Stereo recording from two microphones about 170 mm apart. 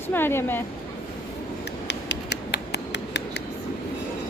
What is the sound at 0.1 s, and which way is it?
Speech, 15° left (ahead or behind).